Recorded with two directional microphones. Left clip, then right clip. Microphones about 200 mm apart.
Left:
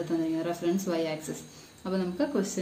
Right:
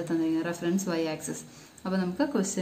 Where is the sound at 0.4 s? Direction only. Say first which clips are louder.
Left 1 dB; 45° right (ahead or behind).